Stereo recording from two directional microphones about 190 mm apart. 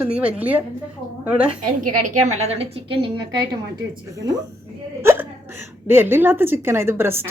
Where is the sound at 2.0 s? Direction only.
35° right (ahead or behind).